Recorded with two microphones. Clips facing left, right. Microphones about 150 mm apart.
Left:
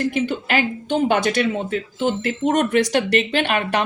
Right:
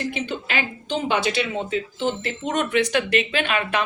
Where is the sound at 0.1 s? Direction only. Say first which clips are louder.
Left 6 dB; 45° left (ahead or behind).